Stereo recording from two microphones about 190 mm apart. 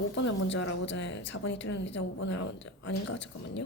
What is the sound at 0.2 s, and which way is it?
A woman's voice, 75° left (ahead or behind).